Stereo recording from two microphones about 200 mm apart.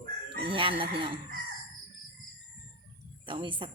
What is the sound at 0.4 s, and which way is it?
Speech, 25° right (ahead or behind).